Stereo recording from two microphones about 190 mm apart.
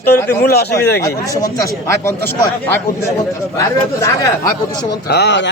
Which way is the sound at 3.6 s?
15° left (ahead or behind).